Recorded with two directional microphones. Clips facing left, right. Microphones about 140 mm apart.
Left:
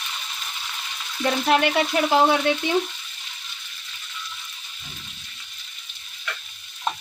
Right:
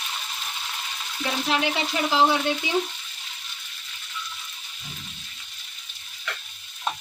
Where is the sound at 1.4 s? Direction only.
60° left (ahead or behind).